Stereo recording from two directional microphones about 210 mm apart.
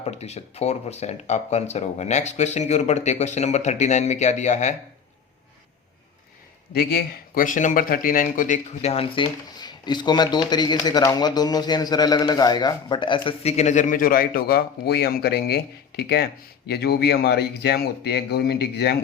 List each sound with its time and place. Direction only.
0.0 s speech: 30° left (ahead or behind)
6.7 s speech: 45° left (ahead or behind)